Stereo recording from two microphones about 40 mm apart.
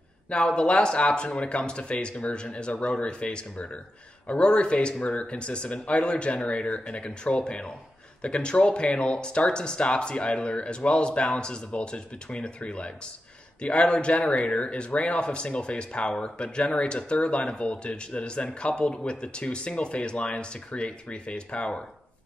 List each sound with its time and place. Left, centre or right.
0.3 s speech: left